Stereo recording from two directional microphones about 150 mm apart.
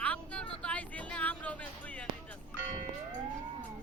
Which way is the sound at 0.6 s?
10° left (ahead or behind).